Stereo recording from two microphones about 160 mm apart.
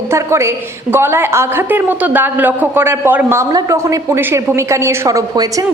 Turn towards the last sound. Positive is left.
turn(degrees=-20)  # may be behind; listen again after turning